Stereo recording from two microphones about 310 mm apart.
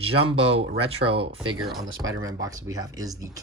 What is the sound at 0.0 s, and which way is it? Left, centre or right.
Speech, centre.